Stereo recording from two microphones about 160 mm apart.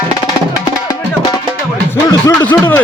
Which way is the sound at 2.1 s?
20° left (ahead or behind).